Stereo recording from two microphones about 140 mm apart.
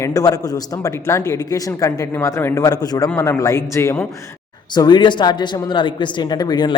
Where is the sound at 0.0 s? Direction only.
25° left (ahead or behind).